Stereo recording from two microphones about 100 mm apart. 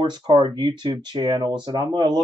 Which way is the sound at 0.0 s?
50° right (ahead or behind).